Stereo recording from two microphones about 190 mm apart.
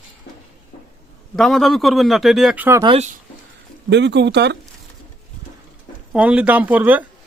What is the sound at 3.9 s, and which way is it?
Speech, 65° right (ahead or behind).